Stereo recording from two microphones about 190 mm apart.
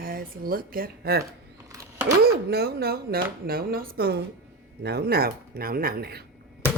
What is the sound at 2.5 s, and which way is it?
Speech, 55° right (ahead or behind).